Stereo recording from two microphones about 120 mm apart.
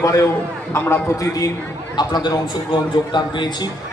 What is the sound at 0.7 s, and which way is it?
A man's voice, 20° left (ahead or behind).